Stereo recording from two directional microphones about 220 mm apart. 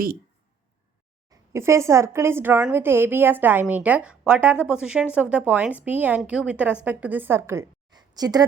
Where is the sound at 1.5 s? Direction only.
10° right (ahead or behind).